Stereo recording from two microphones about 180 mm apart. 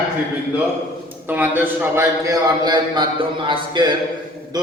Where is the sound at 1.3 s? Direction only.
10° right (ahead or behind).